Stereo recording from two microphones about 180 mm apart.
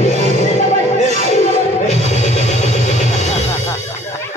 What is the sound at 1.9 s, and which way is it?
Music, 40° left (ahead or behind).